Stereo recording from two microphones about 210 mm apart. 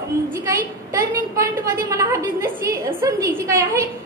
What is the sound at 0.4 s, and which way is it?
A woman's voice, 15° right (ahead or behind).